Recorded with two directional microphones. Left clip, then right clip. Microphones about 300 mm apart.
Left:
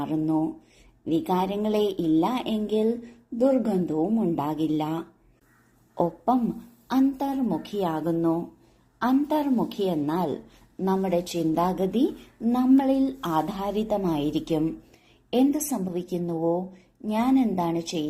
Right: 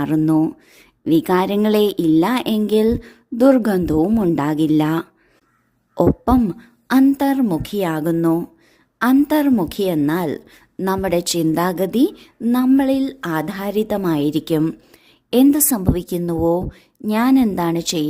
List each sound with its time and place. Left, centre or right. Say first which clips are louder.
0.3 s a woman's voice: right 9 dB; right